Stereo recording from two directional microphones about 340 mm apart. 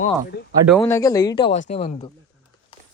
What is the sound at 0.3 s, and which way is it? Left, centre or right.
Speech, left.